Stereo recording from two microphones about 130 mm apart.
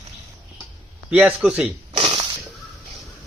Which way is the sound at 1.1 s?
10° right (ahead or behind).